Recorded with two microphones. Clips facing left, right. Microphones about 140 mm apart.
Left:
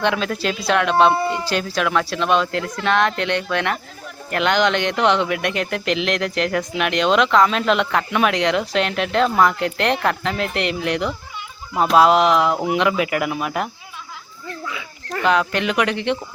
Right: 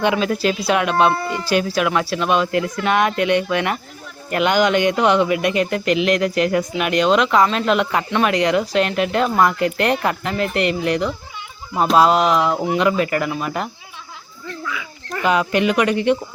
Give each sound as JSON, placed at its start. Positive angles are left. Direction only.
{"t": 0.0, "sound": "speech", "side_deg": -5}
{"t": 14.6, "sound": "dog", "side_deg": 25}
{"t": 15.2, "sound": "speech", "side_deg": -5}